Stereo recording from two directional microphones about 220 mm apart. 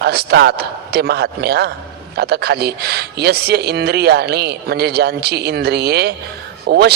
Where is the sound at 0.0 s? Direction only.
45° right (ahead or behind).